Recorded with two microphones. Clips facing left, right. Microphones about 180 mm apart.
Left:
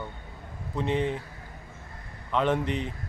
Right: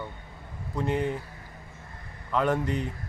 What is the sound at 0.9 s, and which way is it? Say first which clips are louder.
Speech: left 1 dB; 25° left (ahead or behind).